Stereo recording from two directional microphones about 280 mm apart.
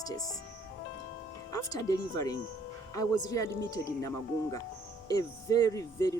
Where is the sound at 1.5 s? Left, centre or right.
Centre.